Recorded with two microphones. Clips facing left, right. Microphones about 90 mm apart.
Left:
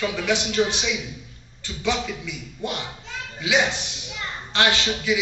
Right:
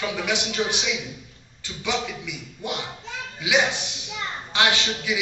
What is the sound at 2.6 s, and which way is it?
Speech, 15° right (ahead or behind).